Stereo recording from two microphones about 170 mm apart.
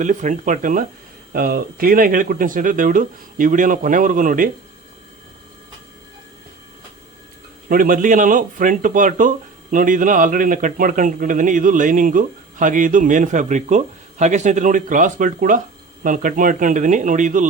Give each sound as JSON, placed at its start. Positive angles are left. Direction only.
{"t": 0.0, "sound": "speech", "side_deg": -45}
{"t": 7.7, "sound": "speech", "side_deg": -55}